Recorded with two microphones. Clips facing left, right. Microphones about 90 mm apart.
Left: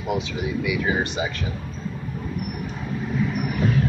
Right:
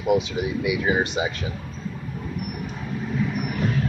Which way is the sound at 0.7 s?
20° right (ahead or behind).